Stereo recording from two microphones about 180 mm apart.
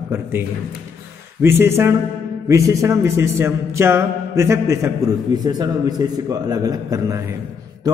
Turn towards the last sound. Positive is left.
turn(degrees=-20)  # may be behind; listen again after turning